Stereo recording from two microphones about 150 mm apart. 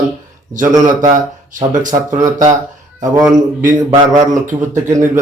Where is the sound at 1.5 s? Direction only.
60° right (ahead or behind).